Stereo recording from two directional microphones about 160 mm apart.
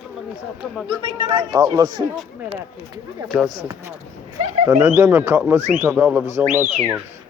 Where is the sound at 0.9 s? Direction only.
30° right (ahead or behind).